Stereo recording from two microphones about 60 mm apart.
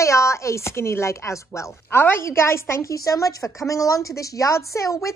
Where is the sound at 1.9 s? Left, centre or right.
Left.